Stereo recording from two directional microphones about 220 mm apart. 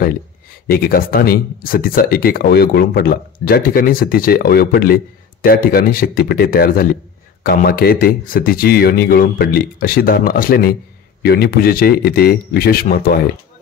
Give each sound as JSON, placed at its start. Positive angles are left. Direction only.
{"t": 0.7, "sound": "speech", "side_deg": 40}